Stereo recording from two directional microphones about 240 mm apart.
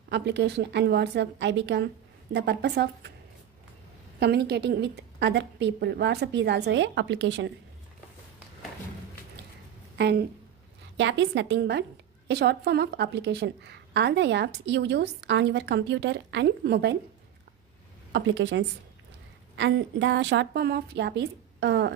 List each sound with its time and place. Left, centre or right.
0.1 s a woman's voice: right
4.2 s a woman's voice: right
9.9 s a woman's voice: right
18.1 s a woman's voice: right